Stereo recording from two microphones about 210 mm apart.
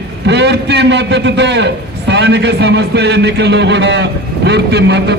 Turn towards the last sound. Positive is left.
turn(degrees=-55)  # may be behind; listen again after turning